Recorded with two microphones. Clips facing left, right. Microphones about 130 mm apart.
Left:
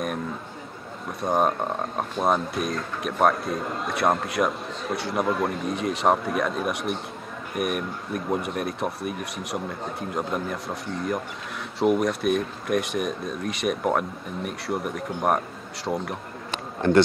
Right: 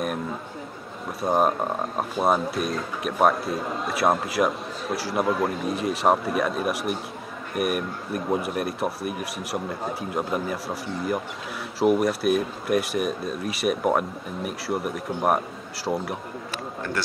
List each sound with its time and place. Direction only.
1.2 s speech: 5° right (ahead or behind)
16.8 s speech: 20° left (ahead or behind)